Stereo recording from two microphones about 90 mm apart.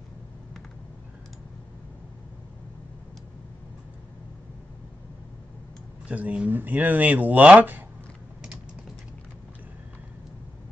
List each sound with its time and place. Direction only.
6.0 s speech: 15° right (ahead or behind)